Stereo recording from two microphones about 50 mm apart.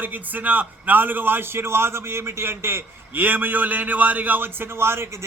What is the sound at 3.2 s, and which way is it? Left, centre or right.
A man's voice, right.